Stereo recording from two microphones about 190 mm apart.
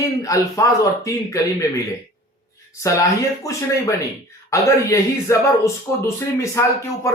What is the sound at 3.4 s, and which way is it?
Speech, 15° left (ahead or behind).